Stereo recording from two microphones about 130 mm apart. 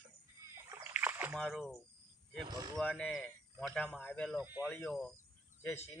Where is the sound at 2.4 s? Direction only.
30° right (ahead or behind).